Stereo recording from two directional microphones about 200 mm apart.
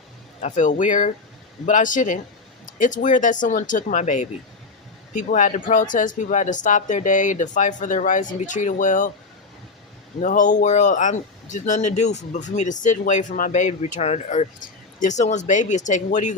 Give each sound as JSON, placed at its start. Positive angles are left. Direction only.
{"t": 0.4, "sound": "speech", "side_deg": 35}
{"t": 10.2, "sound": "speech", "side_deg": 40}